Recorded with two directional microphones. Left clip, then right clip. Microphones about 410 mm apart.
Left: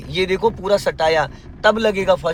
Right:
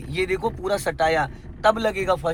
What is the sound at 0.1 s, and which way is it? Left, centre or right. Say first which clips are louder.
Speech: left 6 dB; centre.